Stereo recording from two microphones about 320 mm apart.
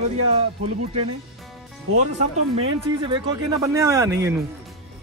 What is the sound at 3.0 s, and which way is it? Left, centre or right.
Speech, centre.